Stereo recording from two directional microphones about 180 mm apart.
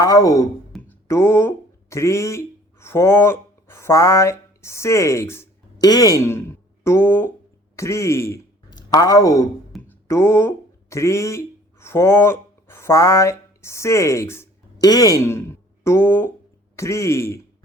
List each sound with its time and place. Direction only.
0.0 s speech: 20° left (ahead or behind)
9.7 s a sound: centre (ahead or behind)
10.1 s speech: 15° left (ahead or behind)